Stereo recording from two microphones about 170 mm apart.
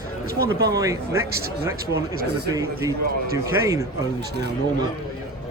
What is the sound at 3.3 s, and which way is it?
Speech, 20° right (ahead or behind).